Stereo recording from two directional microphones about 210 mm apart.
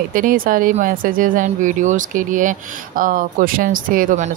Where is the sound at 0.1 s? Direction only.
40° right (ahead or behind).